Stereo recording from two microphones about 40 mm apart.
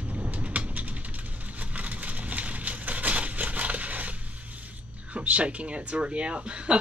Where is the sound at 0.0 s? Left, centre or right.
Right.